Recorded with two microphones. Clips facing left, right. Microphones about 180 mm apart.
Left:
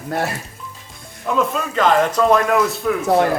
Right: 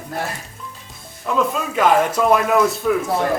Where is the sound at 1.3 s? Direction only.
Centre (ahead or behind).